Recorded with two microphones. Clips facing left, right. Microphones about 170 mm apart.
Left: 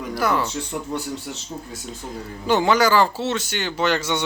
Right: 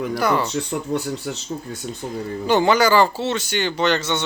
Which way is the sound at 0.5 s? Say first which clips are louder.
Right 4 dB; 60° right (ahead or behind).